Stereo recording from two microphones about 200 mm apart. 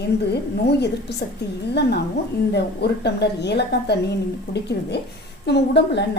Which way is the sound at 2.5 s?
55° left (ahead or behind).